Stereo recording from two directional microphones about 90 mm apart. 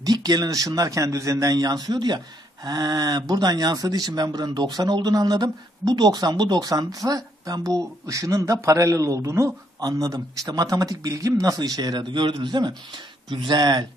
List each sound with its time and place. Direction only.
0.0 s speech: 45° right (ahead or behind)